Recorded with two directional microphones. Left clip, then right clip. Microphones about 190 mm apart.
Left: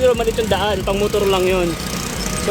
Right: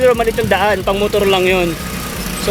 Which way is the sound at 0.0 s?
5° right (ahead or behind).